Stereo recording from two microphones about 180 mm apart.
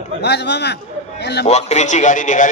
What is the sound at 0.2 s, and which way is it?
A man's voice, 70° left (ahead or behind).